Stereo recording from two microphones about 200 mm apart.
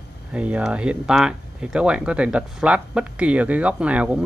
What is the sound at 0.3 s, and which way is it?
Speech, 5° right (ahead or behind).